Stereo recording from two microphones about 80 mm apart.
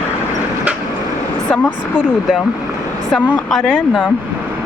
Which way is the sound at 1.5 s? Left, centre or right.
Centre.